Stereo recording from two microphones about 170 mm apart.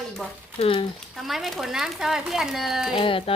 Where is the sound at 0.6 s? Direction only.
30° left (ahead or behind).